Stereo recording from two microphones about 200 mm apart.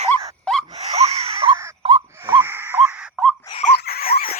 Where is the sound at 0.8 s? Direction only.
30° right (ahead or behind).